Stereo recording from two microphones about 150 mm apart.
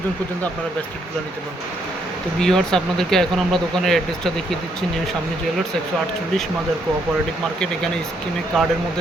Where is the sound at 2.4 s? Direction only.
5° left (ahead or behind).